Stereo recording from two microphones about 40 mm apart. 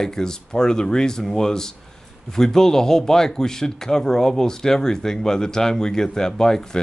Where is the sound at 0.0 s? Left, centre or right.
Centre.